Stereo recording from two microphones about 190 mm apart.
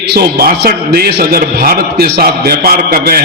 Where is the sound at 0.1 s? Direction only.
55° right (ahead or behind).